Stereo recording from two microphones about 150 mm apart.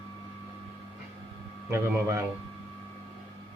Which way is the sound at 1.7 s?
20° right (ahead or behind).